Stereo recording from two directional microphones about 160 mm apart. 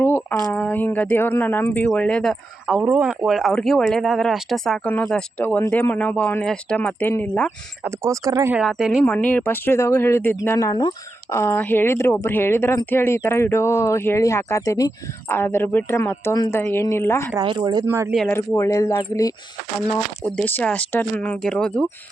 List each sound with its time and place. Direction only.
0.0 s a sound: 15° left (ahead or behind)
0.4 s speech: 10° left (ahead or behind)
7.9 s speech: 20° right (ahead or behind)
8.5 s speech: 5° right (ahead or behind)
9.0 s speech: 10° left (ahead or behind)
17.4 s speech: 30° right (ahead or behind)
17.8 s speech: 15° right (ahead or behind)
18.3 s speech: 15° left (ahead or behind)
20.2 s speech: 10° left (ahead or behind)